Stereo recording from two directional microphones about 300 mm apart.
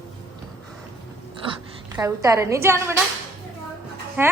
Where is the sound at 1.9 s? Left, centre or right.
Centre.